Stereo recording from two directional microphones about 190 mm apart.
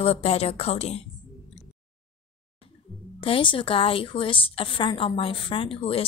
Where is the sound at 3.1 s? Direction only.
30° left (ahead or behind).